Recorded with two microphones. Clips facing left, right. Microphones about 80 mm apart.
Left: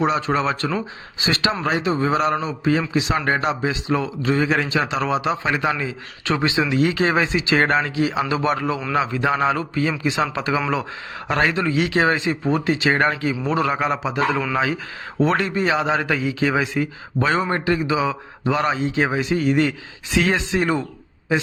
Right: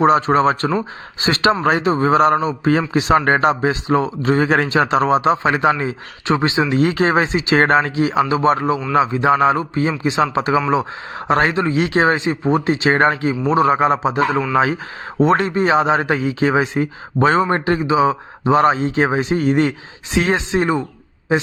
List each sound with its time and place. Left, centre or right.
0.0 s a man's voice: right
6.7 s a man's voice: right
15.2 s a man's voice: right
20.1 s speech: right